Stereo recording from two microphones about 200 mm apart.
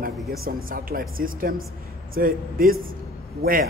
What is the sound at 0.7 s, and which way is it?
A man's voice, 45° right (ahead or behind).